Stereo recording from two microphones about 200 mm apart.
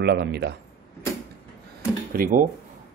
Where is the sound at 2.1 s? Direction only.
45° right (ahead or behind).